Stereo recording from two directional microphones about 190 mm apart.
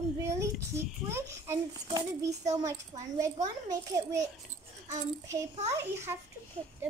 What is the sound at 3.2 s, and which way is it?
A child's voice, 20° right (ahead or behind).